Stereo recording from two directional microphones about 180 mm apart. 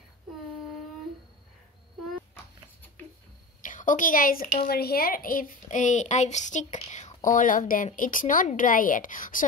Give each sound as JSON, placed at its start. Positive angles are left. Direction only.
{"t": 3.6, "sound": "a woman's voice", "side_deg": 45}